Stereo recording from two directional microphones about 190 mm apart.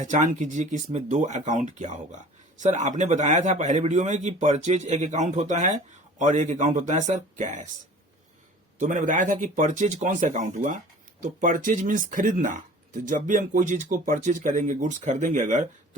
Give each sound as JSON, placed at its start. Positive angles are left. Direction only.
{"t": 0.0, "sound": "speech", "side_deg": -40}
{"t": 8.8, "sound": "speech", "side_deg": -40}